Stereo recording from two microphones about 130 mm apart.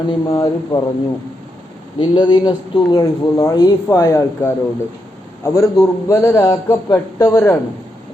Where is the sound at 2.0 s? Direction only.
35° left (ahead or behind).